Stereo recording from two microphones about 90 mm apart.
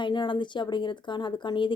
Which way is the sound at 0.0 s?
60° left (ahead or behind).